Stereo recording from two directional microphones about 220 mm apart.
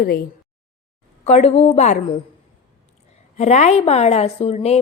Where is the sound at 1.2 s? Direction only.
30° left (ahead or behind).